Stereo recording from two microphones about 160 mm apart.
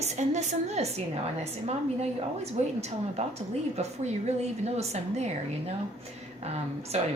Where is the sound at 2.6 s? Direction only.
45° right (ahead or behind).